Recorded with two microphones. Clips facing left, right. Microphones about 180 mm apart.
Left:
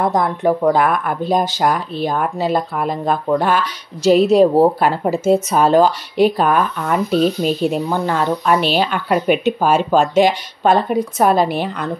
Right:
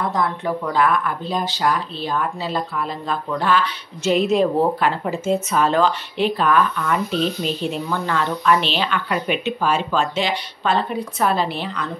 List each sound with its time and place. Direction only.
0.0 s speech: 45° left (ahead or behind)